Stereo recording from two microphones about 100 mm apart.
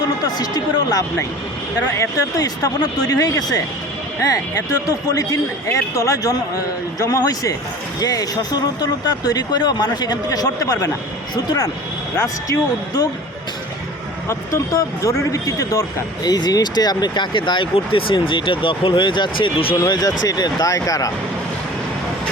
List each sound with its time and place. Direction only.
0.0 s speech: 40° left (ahead or behind)
14.3 s speech: 30° left (ahead or behind); by 19.7 s 60° left (ahead or behind)
19.7 s speech: 40° left (ahead or behind)